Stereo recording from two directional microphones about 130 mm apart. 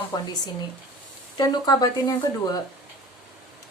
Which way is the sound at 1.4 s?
30° left (ahead or behind).